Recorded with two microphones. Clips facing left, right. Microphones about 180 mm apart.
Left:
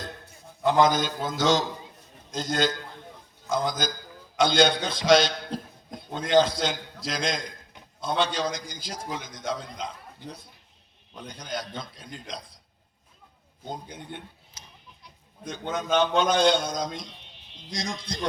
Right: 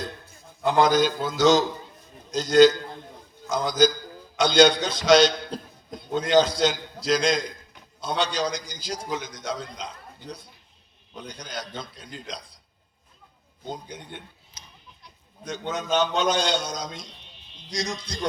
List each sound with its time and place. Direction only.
0.8 s a man's voice: 50° left (ahead or behind)
13.8 s a man's voice: 50° left (ahead or behind)
15.4 s a man's voice: 55° left (ahead or behind)